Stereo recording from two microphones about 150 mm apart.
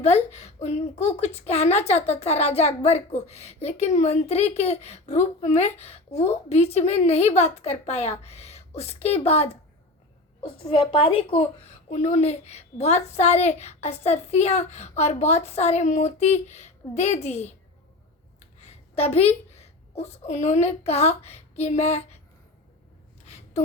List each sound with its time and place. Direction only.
0.0 s a woman's voice: 45° left (ahead or behind)
11.9 s a woman's voice: 50° left (ahead or behind)
18.3 s a sound: 45° left (ahead or behind)
19.5 s a woman's voice: 45° left (ahead or behind)